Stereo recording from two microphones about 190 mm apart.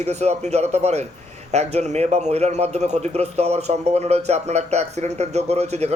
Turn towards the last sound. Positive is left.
turn(degrees=-35)  # may be behind; listen again after turning